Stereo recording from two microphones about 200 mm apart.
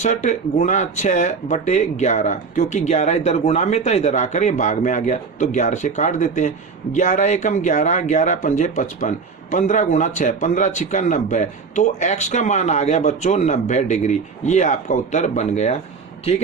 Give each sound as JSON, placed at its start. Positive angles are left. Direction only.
{"t": 0.0, "sound": "speech", "side_deg": 35}